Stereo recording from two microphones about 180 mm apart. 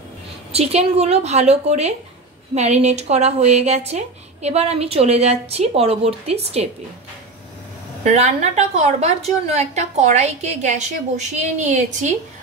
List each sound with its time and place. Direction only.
0.5 s speech: 35° right (ahead or behind)
8.0 s speech: 40° right (ahead or behind)